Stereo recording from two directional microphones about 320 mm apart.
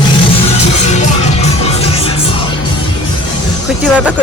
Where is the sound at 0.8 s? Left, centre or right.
Left.